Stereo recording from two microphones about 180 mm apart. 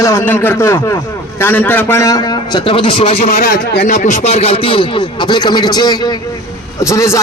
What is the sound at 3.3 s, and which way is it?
A man's voice, 55° left (ahead or behind).